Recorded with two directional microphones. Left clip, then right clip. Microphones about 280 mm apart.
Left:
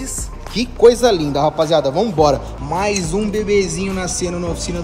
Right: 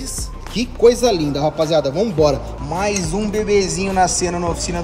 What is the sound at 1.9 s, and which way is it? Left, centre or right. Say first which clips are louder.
Speech: left 2 dB; centre.